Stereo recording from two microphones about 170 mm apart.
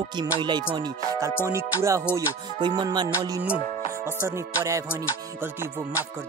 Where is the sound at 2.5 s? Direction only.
25° right (ahead or behind).